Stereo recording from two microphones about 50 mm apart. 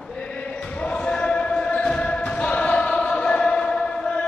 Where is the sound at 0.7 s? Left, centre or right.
Left.